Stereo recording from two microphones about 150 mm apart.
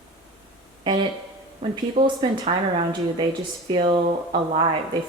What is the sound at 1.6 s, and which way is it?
Speech, 40° right (ahead or behind).